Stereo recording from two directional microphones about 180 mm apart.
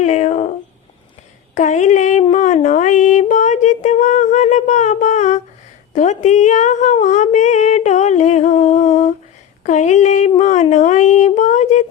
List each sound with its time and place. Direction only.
0.0 s speech: 40° left (ahead or behind)
1.5 s speech: 40° left (ahead or behind)
2.3 s a sound: 40° left (ahead or behind)